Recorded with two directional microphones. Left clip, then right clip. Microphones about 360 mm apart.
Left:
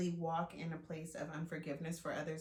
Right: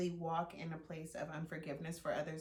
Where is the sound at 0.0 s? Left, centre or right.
Centre.